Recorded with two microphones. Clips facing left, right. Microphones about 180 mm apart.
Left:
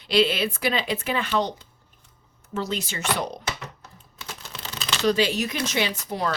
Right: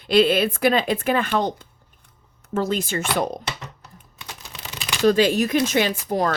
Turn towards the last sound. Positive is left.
turn(degrees=-45)  # may be behind; listen again after turning